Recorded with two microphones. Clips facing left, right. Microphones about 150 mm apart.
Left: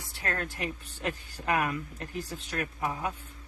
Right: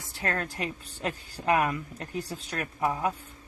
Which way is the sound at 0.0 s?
40° right (ahead or behind).